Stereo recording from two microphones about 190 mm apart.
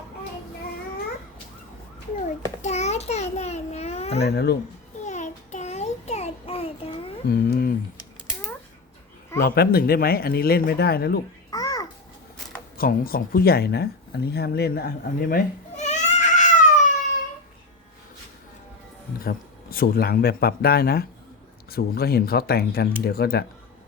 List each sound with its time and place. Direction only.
2.6 s babbling: 35° left (ahead or behind)
4.2 s speech: 60° left (ahead or behind)
5.0 s child singing: 40° left (ahead or behind)
7.3 s speech: 55° left (ahead or behind)
9.4 s speech: 55° left (ahead or behind)
11.5 s babbling: 20° left (ahead or behind)
12.7 s speech: 50° left (ahead or behind)
19.2 s speech: 50° left (ahead or behind)